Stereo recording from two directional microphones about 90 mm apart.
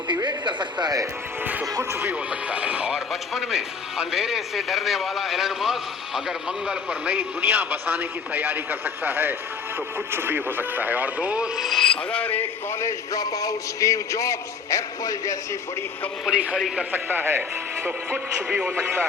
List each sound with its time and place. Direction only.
0.2 s speech: 55° right (ahead or behind)
1.9 s speech: 25° right (ahead or behind)
2.5 s speech: 15° right (ahead or behind)
11.6 s speech: centre (ahead or behind)
12.1 s speech: 20° left (ahead or behind)
12.8 s a man's voice: 40° left (ahead or behind)
16.2 s speech: 10° right (ahead or behind)
16.6 s speech: centre (ahead or behind)
16.9 s speech: 20° right (ahead or behind)